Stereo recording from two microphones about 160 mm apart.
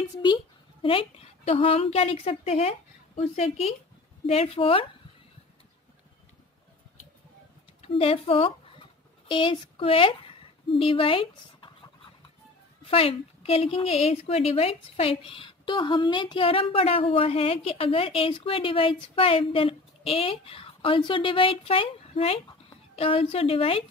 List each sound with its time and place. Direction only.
0.8 s a woman's voice: 35° left (ahead or behind)
7.8 s a woman's voice: 40° left (ahead or behind)
12.9 s a woman's voice: 35° left (ahead or behind)